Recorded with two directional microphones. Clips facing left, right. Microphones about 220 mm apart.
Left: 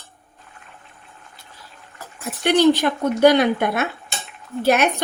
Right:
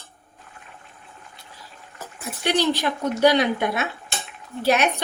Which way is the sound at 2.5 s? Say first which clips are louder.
Left 6 dB; 55° left (ahead or behind).